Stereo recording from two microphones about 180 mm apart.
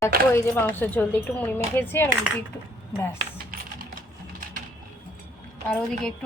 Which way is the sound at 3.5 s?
50° right (ahead or behind).